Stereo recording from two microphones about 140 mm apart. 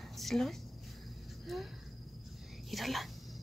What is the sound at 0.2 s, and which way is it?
A woman's voice, centre (ahead or behind).